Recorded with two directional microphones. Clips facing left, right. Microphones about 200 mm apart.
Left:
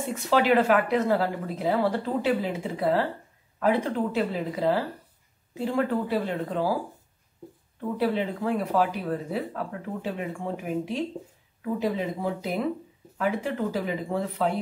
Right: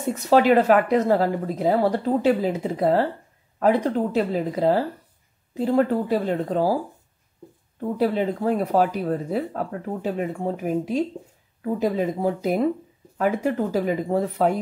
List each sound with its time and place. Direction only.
0.0 s speech: 40° right (ahead or behind)
8.0 s speech: 45° right (ahead or behind)